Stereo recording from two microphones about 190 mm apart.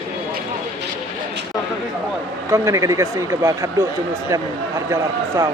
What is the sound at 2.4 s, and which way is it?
A man's voice, 15° right (ahead or behind).